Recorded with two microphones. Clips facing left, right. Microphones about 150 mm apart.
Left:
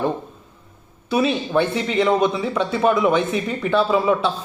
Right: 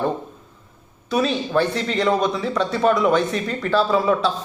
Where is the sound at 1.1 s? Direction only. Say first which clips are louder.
Left 1 dB; 5° left (ahead or behind).